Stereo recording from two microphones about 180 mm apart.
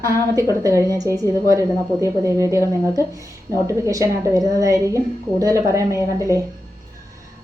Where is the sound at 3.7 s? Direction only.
15° right (ahead or behind).